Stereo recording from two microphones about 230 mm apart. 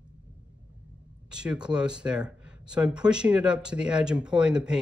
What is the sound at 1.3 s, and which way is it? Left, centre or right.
Speech, centre.